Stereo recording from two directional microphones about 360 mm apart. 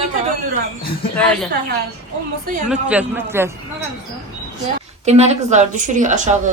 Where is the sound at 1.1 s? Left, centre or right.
Centre.